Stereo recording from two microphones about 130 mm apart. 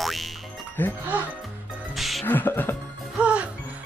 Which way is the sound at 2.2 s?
15° left (ahead or behind).